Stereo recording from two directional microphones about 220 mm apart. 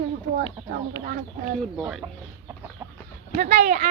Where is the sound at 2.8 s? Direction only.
15° right (ahead or behind).